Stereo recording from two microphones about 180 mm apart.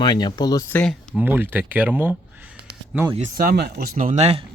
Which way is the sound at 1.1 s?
10° right (ahead or behind).